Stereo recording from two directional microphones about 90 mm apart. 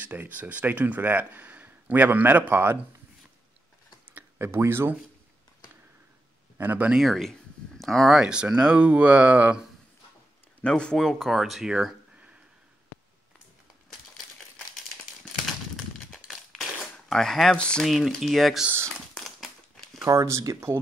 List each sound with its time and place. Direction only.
0.0 s speech: 20° right (ahead or behind)
4.1 s a sound: 30° right (ahead or behind)
6.6 s speech: 20° right (ahead or behind)
6.9 s speech: centre (ahead or behind)
10.6 s speech: 10° left (ahead or behind); by 12.3 s 5° right (ahead or behind)
15.2 s crumpling: centre (ahead or behind)
17.8 s speech: centre (ahead or behind)
18.9 s a sound: centre (ahead or behind)
20.1 s speech: 35° right (ahead or behind)